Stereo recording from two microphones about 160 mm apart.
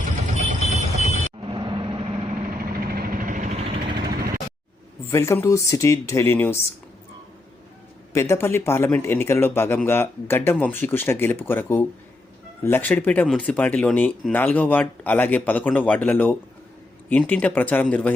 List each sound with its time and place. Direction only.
0.9 s vehicle: 40° right (ahead or behind)
2.5 s vehicle: 65° right (ahead or behind); by 3.9 s 35° right (ahead or behind)
4.1 s vehicle: 75° right (ahead or behind)
5.0 s speech: 15° left (ahead or behind)
8.1 s speech: 15° left (ahead or behind)